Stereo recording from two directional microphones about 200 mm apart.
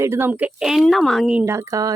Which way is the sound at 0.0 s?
10° right (ahead or behind).